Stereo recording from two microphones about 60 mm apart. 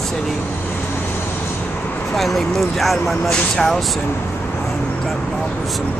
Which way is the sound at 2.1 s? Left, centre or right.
Centre.